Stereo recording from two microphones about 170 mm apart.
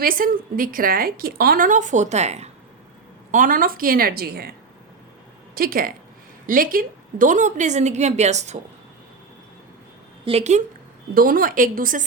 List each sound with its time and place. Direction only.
0.0 s a woman's voice: 55° right (ahead or behind); by 2.5 s 40° right (ahead or behind)
3.3 s a woman's voice: 55° right (ahead or behind)
5.5 s a woman's voice: 60° right (ahead or behind); by 8.5 s 40° right (ahead or behind)
10.2 s speech: 40° right (ahead or behind)
11.1 s a woman's voice: 60° right (ahead or behind)